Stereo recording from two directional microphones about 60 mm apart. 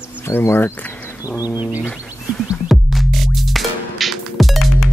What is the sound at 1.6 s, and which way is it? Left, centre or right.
Bird, right.